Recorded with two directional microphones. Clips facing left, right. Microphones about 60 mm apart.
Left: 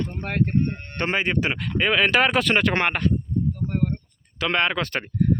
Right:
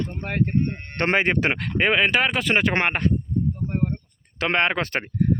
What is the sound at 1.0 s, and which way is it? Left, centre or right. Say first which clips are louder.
Speech: right 3 dB; right.